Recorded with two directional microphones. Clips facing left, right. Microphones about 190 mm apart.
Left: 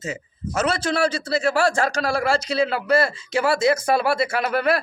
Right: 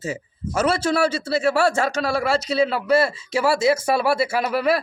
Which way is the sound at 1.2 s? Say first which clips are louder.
Right 1 dB; 5° right (ahead or behind).